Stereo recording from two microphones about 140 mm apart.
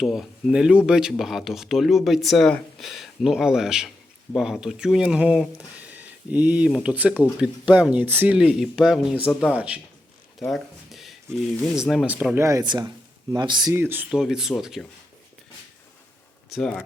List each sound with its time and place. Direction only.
0.0 s speech: centre (ahead or behind); by 13.7 s 30° right (ahead or behind)
13.7 s speech: 15° right (ahead or behind)
16.5 s speech: 5° left (ahead or behind)